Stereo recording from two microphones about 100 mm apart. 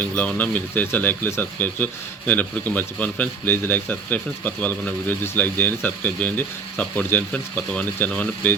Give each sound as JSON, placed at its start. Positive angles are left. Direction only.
{"t": 0.0, "sound": "speech", "side_deg": 15}